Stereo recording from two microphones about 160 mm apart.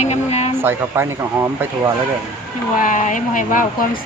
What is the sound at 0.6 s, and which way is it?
Speech, 15° right (ahead or behind).